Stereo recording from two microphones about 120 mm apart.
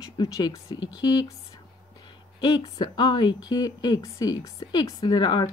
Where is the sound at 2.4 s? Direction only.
35° left (ahead or behind).